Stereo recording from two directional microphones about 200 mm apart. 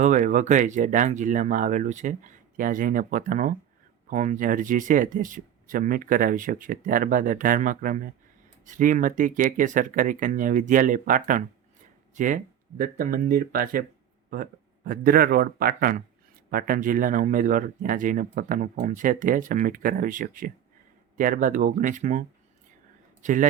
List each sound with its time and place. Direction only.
0.0 s speech: 40° right (ahead or behind)
14.8 s speech: 45° right (ahead or behind)